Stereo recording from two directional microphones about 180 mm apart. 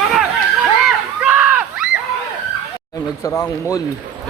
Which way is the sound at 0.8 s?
5° right (ahead or behind).